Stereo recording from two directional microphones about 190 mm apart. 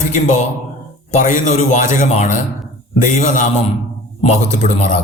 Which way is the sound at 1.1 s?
40° left (ahead or behind).